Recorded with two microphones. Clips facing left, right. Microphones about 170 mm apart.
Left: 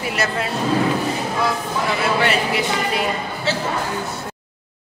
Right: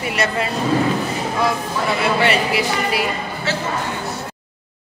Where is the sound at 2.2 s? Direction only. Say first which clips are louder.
Right 2 dB; 5° right (ahead or behind).